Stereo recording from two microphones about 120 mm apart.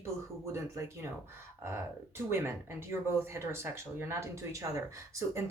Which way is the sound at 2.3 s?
20° right (ahead or behind).